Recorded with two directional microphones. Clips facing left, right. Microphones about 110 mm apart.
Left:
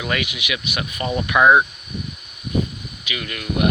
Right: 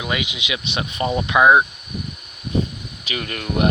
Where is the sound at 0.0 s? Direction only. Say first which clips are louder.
Left 1 dB; 15° right (ahead or behind).